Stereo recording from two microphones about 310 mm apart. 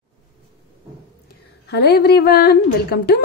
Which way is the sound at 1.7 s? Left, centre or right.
Left.